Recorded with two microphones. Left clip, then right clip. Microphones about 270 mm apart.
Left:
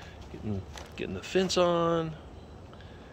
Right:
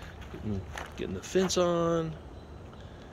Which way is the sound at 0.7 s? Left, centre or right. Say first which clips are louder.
Right 1 dB; centre.